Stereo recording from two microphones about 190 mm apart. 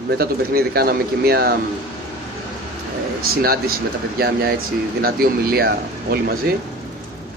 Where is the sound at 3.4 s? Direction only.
55° right (ahead or behind).